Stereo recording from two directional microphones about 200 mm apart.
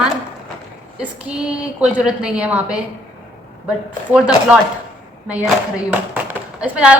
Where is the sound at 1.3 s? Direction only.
5° right (ahead or behind).